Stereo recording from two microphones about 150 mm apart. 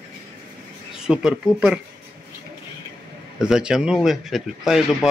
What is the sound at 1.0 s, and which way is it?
Speech, 5° right (ahead or behind).